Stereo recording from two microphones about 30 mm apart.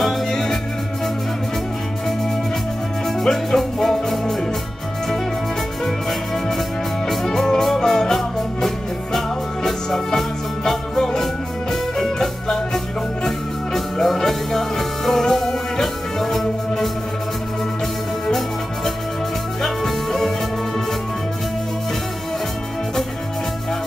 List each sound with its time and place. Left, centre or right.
0.3 s music: centre
3.3 s music: centre
5.9 s music: centre
19.6 s music: centre